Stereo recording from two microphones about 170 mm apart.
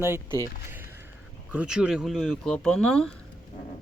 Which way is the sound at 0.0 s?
15° right (ahead or behind).